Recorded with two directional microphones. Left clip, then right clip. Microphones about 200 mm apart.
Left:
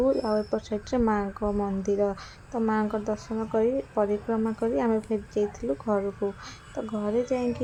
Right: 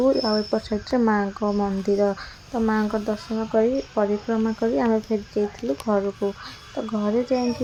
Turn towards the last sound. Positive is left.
turn(degrees=-20)  # may be behind; listen again after turning